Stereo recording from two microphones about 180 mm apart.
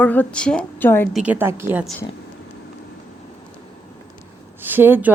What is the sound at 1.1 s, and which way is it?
Speech, 10° right (ahead or behind).